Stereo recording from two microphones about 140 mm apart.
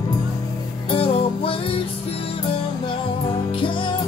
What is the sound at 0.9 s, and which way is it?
Music, 45° left (ahead or behind).